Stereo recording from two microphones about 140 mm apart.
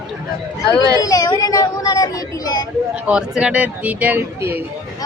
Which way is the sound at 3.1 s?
5° right (ahead or behind).